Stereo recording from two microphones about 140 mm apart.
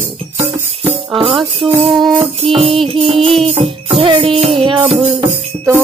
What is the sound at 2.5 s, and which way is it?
Music, 40° right (ahead or behind).